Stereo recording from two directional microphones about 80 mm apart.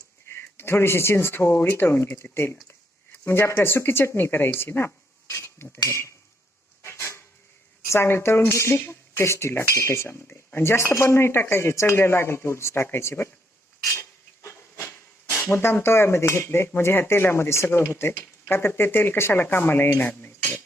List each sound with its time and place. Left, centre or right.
0.3 s speech: left
5.3 s a sound: left
5.7 s speech: left
6.8 s a sound: left
7.9 s speech: left
14.4 s speech: left